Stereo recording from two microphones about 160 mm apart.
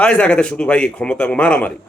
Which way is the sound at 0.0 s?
5° left (ahead or behind).